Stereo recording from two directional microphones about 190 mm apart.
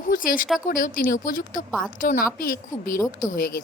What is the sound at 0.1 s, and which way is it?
A woman's voice, 45° left (ahead or behind).